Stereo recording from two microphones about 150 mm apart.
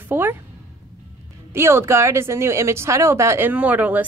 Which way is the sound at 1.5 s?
15° right (ahead or behind).